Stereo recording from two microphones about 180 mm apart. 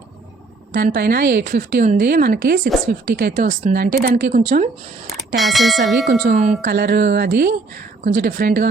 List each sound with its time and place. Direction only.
0.7 s speech: 60° right (ahead or behind)
5.4 s speech: centre (ahead or behind)
6.1 s speech: 40° right (ahead or behind)
6.6 s speech: 60° right (ahead or behind)